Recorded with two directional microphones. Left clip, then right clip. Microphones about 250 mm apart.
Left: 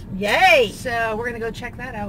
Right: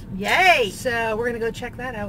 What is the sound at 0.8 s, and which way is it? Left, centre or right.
Speech, centre.